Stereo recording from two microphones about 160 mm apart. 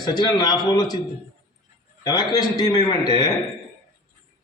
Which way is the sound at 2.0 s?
25° left (ahead or behind).